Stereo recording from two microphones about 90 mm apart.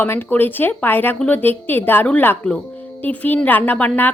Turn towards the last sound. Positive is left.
turn(degrees=20)  # may be behind; listen again after turning